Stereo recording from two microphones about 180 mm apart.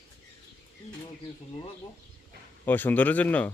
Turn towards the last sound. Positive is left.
turn(degrees=10)  # may be behind; listen again after turning